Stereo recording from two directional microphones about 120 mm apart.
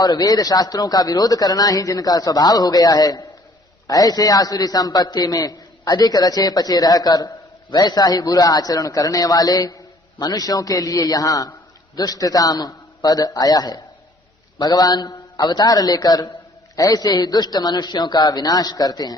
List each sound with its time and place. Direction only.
0.0 s a man's voice: 35° left (ahead or behind)